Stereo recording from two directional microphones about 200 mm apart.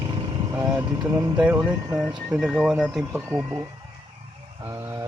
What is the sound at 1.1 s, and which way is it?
Speech, 15° right (ahead or behind).